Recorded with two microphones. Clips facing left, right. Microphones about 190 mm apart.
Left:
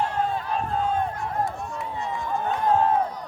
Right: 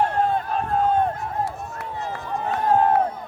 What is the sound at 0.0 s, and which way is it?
Run, 55° right (ahead or behind).